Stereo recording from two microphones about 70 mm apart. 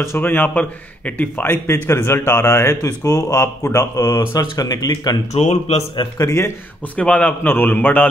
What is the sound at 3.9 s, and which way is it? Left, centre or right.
Speech, left.